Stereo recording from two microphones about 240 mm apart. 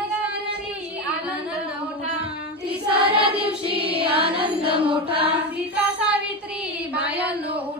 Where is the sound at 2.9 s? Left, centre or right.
Right.